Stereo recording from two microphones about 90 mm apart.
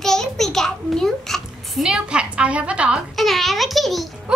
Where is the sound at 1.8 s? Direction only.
10° right (ahead or behind).